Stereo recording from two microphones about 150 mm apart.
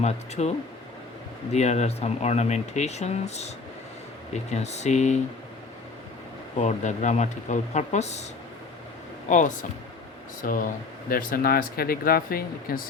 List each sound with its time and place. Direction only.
0.0 s speech: 45° left (ahead or behind)
1.5 s speech: 50° left (ahead or behind)
4.5 s speech: 50° left (ahead or behind)
6.6 s speech: 50° left (ahead or behind)
9.3 s speech: 60° left (ahead or behind)